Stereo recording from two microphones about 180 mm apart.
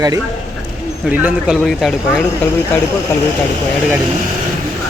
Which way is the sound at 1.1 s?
5° right (ahead or behind).